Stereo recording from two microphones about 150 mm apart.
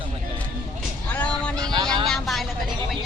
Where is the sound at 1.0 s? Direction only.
10° left (ahead or behind).